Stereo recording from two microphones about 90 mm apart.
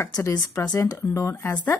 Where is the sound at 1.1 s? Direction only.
30° left (ahead or behind).